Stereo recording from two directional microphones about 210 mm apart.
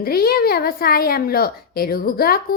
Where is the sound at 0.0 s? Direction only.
45° left (ahead or behind).